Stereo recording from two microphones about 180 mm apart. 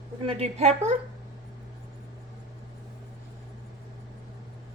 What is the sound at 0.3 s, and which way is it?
Speech, 35° right (ahead or behind).